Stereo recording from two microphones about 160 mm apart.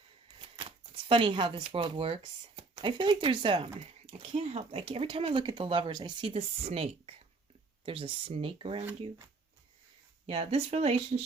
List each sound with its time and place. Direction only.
0.3 s a sound: 35° right (ahead or behind)
1.0 s speech: 30° right (ahead or behind)
10.2 s speech: 40° right (ahead or behind)